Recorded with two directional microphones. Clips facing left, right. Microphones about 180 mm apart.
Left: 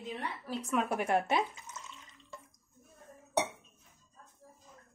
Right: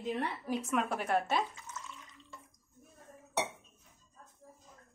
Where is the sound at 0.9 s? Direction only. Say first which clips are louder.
Left 2 dB; 15° left (ahead or behind).